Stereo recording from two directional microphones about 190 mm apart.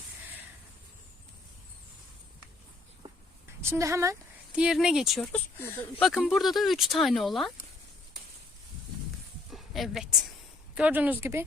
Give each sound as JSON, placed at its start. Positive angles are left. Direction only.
{"t": 3.6, "sound": "speech", "side_deg": -15}
{"t": 4.5, "sound": "speech", "side_deg": -5}
{"t": 9.5, "sound": "a sound", "side_deg": 0}
{"t": 10.8, "sound": "speech", "side_deg": -10}